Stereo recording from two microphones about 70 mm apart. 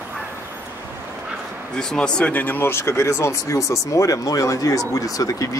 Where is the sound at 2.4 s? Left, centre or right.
Left.